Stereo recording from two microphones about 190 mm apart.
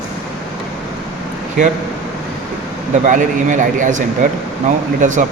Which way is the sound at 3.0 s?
40° right (ahead or behind).